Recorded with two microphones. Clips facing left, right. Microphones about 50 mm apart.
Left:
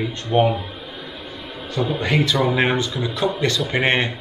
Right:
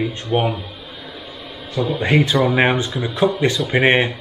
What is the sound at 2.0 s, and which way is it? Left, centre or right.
Speech, right.